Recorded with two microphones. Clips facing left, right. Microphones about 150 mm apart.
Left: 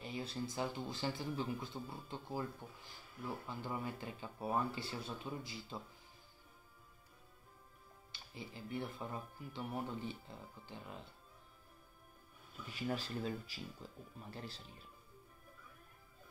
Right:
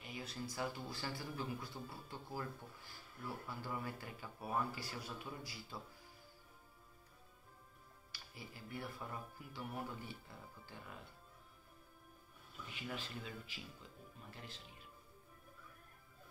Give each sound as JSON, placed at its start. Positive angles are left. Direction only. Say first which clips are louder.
{"t": 0.0, "sound": "speech", "louder": "left 5 dB", "side_deg": 30}
{"t": 8.1, "sound": "speech", "louder": "left 4 dB", "side_deg": 25}
{"t": 12.7, "sound": "speech", "louder": "left 7 dB", "side_deg": 40}